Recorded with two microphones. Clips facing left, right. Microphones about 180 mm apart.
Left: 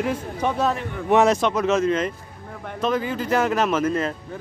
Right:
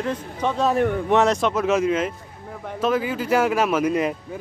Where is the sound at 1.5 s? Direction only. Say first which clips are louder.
Even; 5° right (ahead or behind).